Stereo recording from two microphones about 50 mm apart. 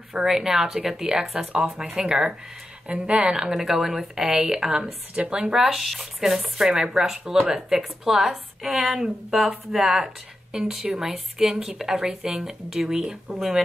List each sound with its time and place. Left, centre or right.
0.1 s speech: centre
1.5 s speech: centre
5.6 s speech: centre